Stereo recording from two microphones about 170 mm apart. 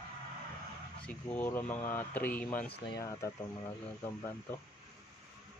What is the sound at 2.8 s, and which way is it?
Speech, 20° left (ahead or behind).